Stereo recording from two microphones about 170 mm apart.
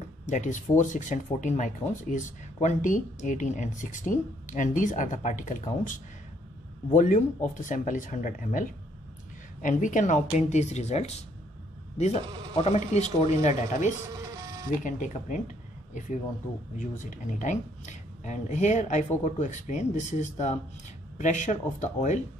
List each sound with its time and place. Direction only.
0.3 s speech: 45° left (ahead or behind)
12.5 s speech: 40° left (ahead or behind)
16.7 s speech: 50° left (ahead or behind)